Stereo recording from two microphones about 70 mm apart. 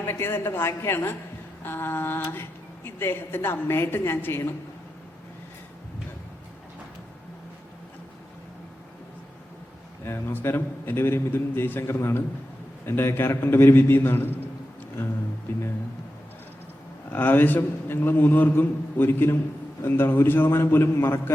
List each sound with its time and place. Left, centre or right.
0.0 s a woman's voice: left
10.1 s a woman's voice: left
17.1 s a man's voice: left